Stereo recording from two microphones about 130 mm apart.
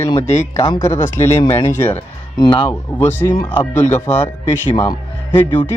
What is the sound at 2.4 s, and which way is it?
Speech, 40° left (ahead or behind).